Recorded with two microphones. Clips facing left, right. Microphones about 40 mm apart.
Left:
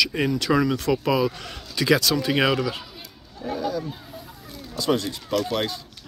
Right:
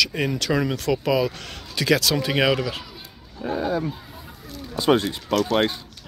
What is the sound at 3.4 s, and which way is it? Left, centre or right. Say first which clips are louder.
Speech: right 3 dB; right.